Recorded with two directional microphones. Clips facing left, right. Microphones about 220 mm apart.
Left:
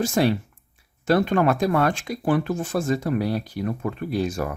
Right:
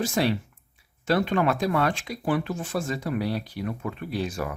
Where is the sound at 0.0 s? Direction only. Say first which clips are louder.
Left 4 dB; 45° left (ahead or behind).